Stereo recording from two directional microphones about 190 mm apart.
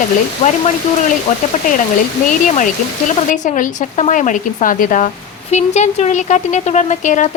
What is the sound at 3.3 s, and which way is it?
Speech, 40° left (ahead or behind).